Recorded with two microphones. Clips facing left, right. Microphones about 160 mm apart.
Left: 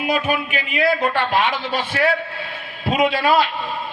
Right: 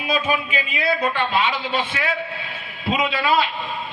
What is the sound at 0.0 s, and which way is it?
Speech, 55° left (ahead or behind).